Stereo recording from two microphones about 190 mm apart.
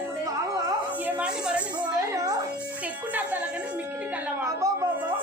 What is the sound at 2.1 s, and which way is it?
Music, 15° right (ahead or behind).